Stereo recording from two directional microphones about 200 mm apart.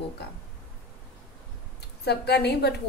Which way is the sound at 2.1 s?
55° left (ahead or behind).